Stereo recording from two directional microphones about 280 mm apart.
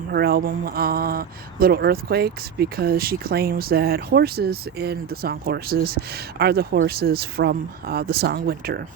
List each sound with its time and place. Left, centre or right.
0.1 s speech: right